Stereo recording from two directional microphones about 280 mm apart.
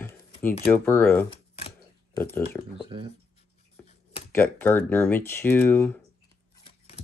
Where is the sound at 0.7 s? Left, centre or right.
Centre.